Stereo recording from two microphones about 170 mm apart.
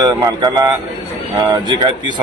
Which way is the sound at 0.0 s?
20° right (ahead or behind).